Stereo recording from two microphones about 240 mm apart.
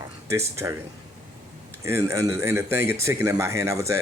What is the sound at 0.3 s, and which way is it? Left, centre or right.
Speech, centre.